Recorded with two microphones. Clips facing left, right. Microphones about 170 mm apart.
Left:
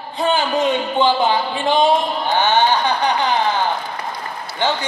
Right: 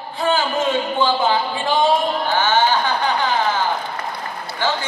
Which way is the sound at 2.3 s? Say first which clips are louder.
Left 3 dB; 20° left (ahead or behind).